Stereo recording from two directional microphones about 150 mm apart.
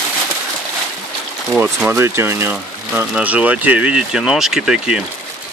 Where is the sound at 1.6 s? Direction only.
10° right (ahead or behind).